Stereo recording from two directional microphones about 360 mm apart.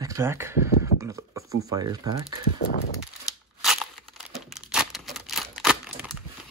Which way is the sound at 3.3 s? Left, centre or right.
Centre.